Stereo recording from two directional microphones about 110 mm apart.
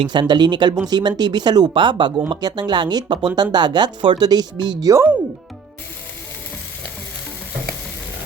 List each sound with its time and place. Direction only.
0.0 s speech: 45° right (ahead or behind)